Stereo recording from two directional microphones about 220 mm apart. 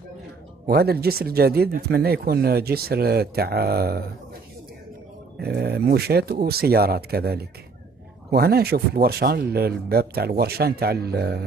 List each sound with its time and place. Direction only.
0.7 s speech: 45° right (ahead or behind)
5.4 s speech: 45° right (ahead or behind)